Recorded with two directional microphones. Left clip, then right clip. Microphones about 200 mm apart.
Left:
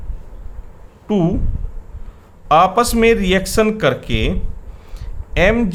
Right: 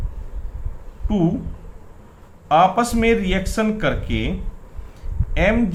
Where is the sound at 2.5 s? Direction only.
50° left (ahead or behind).